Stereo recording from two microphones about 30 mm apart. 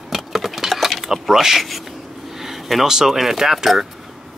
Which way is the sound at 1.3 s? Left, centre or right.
Centre.